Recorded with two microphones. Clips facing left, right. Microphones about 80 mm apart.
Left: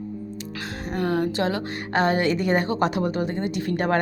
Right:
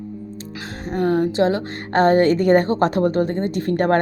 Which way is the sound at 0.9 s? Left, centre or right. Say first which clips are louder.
Right 5 dB; right.